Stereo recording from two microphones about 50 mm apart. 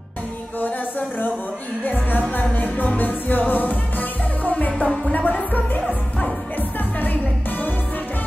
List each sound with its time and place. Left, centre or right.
0.6 s music: left